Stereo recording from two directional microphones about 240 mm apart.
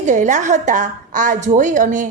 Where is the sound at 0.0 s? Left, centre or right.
Right.